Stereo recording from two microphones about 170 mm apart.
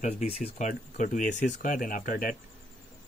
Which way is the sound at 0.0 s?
40° left (ahead or behind).